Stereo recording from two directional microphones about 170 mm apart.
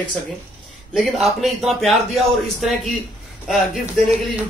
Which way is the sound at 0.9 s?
Centre (ahead or behind).